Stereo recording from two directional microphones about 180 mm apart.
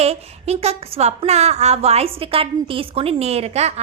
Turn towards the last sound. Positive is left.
turn(degrees=-35)  # may be behind; listen again after turning